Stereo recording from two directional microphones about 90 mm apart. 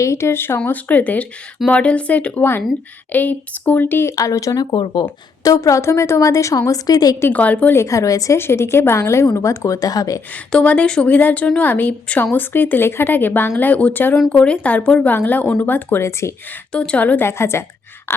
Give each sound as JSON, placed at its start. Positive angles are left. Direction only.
{"t": 0.0, "sound": "a woman's voice", "side_deg": 30}
{"t": 4.1, "sound": "a woman's voice", "side_deg": 40}
{"t": 4.6, "sound": "speech", "side_deg": 60}
{"t": 5.4, "sound": "a woman's voice", "side_deg": 40}
{"t": 7.2, "sound": "speech", "side_deg": 20}
{"t": 7.8, "sound": "a woman's voice", "side_deg": 35}
{"t": 8.4, "sound": "a woman's voice", "side_deg": 30}
{"t": 10.3, "sound": "a woman's voice", "side_deg": 15}
{"t": 16.7, "sound": "speech", "side_deg": 10}
{"t": 17.2, "sound": "a woman's voice", "side_deg": 30}